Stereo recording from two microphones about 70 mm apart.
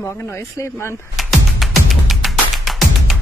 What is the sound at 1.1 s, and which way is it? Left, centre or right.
Music, centre.